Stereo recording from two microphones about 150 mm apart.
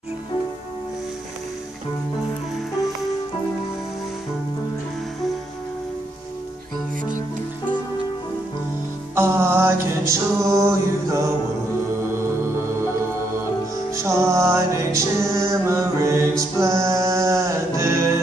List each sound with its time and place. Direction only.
9.1 s music: 15° right (ahead or behind)
13.9 s music: 20° right (ahead or behind)